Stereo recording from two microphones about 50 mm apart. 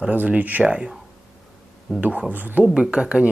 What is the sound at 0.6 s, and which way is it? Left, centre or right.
Speech, centre.